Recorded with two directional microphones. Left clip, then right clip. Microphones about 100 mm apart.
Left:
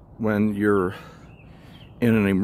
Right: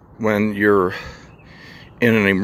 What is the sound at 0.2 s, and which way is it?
Speech, 35° left (ahead or behind).